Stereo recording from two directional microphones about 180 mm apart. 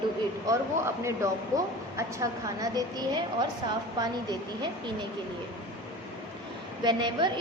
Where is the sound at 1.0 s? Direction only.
15° right (ahead or behind).